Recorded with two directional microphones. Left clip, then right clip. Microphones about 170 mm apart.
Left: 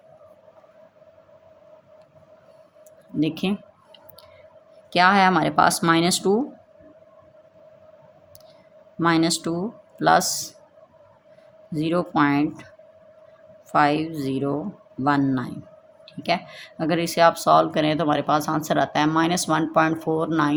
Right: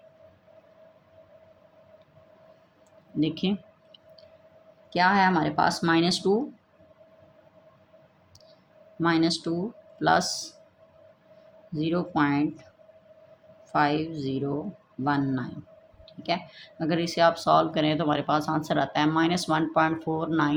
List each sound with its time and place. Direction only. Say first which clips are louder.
3.2 s speech: left 3 dB; 30° left (ahead or behind)
4.9 s speech: left 5 dB; 45° left (ahead or behind)
9.0 s speech: left 4 dB; 35° left (ahead or behind)
11.7 s speech: left 5 dB; 35° left (ahead or behind)
13.7 s speech: left 5 dB; 35° left (ahead or behind)